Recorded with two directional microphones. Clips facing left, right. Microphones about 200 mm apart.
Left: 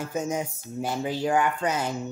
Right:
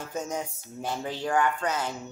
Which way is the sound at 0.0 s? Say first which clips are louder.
Left 4 dB; 10° left (ahead or behind).